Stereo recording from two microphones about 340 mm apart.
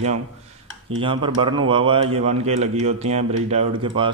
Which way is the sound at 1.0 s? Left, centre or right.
Centre.